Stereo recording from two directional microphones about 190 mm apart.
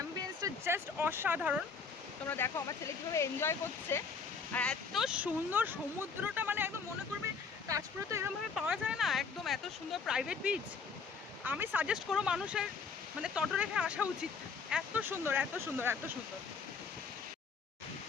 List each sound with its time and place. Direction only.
0.4 s speech: 15° right (ahead or behind)
2.3 s speech: 15° left (ahead or behind); by 8.3 s 15° right (ahead or behind)
8.5 s speech: 5° right (ahead or behind)